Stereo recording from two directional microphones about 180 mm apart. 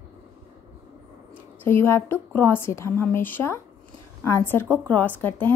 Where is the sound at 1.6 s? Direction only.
10° left (ahead or behind).